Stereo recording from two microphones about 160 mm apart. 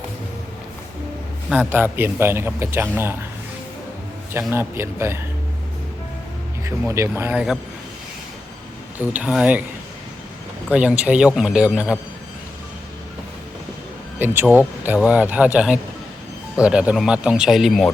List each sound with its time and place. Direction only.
1.5 s a man's voice: 10° right (ahead or behind)
4.5 s a man's voice: 15° right (ahead or behind)
6.7 s a man's voice: 15° right (ahead or behind)
9.0 s a man's voice: 10° right (ahead or behind)
10.7 s a man's voice: 10° right (ahead or behind)
14.2 s a man's voice: 15° right (ahead or behind)